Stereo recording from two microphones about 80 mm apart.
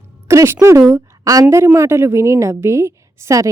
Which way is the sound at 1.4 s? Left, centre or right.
Right.